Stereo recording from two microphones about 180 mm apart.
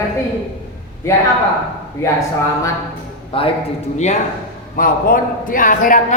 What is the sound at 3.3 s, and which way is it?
Speech, 30° left (ahead or behind).